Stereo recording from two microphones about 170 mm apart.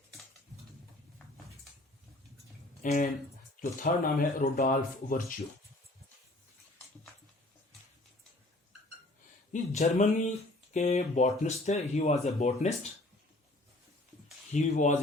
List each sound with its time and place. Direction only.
2.8 s speech: 55° left (ahead or behind)
9.5 s speech: 45° left (ahead or behind)
14.5 s speech: 45° left (ahead or behind)